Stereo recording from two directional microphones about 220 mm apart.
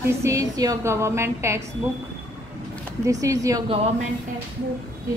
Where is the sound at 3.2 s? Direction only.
15° right (ahead or behind).